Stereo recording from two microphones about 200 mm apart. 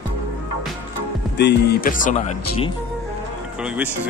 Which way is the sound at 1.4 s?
55° left (ahead or behind).